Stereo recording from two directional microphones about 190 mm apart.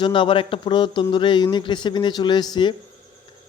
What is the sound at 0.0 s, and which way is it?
Speech, 25° left (ahead or behind).